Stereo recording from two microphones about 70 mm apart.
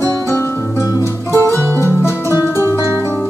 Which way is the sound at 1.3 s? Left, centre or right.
Right.